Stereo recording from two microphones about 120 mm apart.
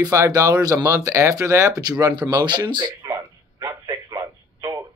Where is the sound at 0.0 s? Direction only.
30° right (ahead or behind).